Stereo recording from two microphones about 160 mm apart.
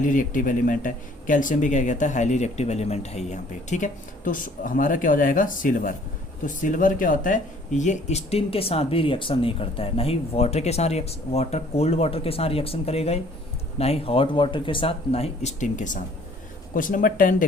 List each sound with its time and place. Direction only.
0.0 s speech: 55° left (ahead or behind)